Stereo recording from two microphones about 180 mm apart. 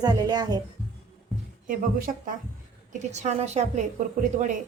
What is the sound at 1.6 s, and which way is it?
Speech, 50° right (ahead or behind).